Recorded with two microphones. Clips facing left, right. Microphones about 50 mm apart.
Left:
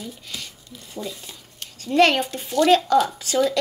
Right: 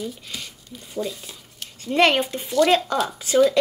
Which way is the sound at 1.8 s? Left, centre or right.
Right.